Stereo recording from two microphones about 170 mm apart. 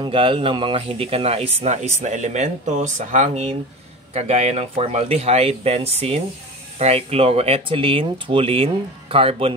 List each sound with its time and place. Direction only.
0.0 s speech: 30° right (ahead or behind)